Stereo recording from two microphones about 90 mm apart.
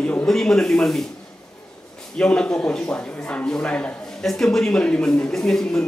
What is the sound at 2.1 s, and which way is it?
Speech, 10° left (ahead or behind).